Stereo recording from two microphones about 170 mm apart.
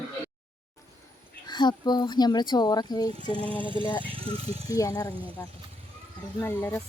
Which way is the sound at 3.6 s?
30° right (ahead or behind).